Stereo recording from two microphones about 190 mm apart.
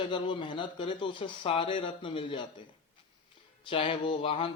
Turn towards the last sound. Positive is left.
turn(degrees=25)  # may be behind; listen again after turning